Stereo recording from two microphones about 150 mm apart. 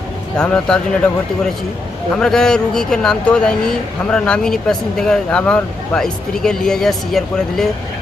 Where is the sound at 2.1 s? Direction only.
5° left (ahead or behind).